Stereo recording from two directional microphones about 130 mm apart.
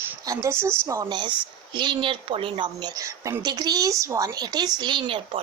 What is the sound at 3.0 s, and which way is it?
A woman's voice, 25° right (ahead or behind).